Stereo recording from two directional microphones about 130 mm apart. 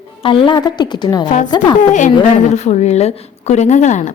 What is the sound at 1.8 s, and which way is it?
Speech, 70° left (ahead or behind).